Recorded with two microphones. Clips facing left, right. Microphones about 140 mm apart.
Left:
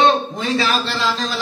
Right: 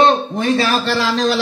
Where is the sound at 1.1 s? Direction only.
90° right.